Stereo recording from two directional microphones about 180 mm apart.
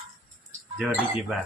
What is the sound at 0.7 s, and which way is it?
Speech, 5° right (ahead or behind).